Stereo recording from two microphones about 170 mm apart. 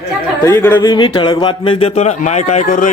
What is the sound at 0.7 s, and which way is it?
A man's voice, 25° left (ahead or behind).